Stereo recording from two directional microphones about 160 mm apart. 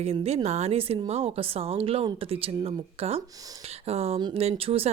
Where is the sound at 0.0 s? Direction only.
40° right (ahead or behind).